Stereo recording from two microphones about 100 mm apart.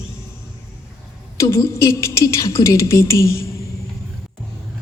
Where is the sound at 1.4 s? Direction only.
30° left (ahead or behind).